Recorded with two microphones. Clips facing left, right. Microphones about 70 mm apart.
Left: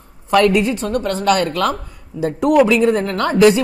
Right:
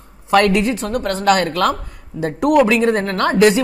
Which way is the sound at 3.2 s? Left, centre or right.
Right.